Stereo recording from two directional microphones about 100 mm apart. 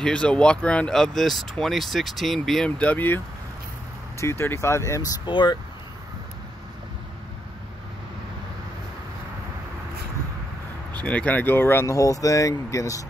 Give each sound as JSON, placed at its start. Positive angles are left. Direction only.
{"t": 0.0, "sound": "speech", "side_deg": 10}
{"t": 4.2, "sound": "speech", "side_deg": 25}
{"t": 5.2, "sound": "speech", "side_deg": 50}
{"t": 11.1, "sound": "speech", "side_deg": 15}